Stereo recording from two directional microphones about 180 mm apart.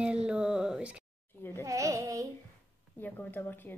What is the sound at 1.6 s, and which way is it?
Speech, 20° right (ahead or behind).